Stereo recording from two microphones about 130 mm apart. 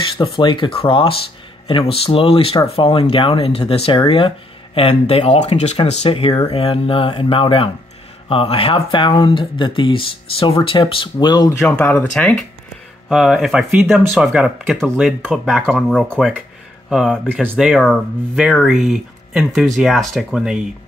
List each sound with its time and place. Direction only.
0.2 s speech: 40° left (ahead or behind)
11.9 s speech: 5° left (ahead or behind)